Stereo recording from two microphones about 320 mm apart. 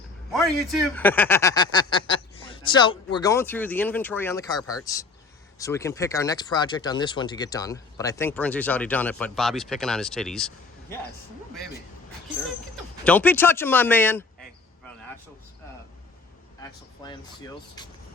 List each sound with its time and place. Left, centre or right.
0.3 s speech: centre
4.6 s speech: left
5.5 s speech: centre
13.1 s speech: centre
16.6 s speech: centre